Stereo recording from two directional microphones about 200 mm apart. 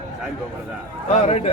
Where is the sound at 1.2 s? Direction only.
30° left (ahead or behind).